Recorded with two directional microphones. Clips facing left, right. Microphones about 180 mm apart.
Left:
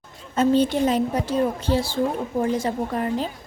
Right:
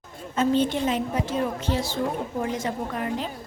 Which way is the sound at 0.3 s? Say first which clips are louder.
Left 3 dB; 40° left (ahead or behind).